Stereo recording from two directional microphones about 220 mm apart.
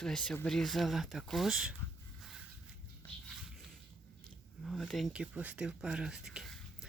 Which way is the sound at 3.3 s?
Centre (ahead or behind).